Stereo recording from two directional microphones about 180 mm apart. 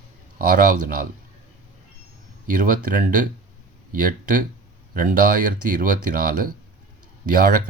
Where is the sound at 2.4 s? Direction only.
50° right (ahead or behind).